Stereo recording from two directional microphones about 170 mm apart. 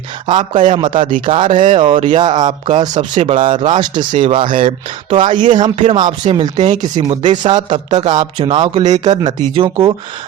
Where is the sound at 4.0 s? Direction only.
50° right (ahead or behind).